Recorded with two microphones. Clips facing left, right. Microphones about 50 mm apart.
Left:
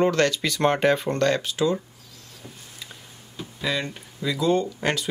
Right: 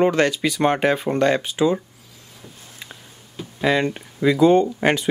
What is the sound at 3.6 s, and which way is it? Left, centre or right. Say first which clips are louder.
Speech: right 8 dB; right.